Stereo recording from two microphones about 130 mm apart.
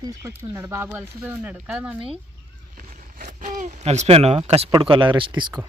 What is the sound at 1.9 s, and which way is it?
Speech, 45° right (ahead or behind).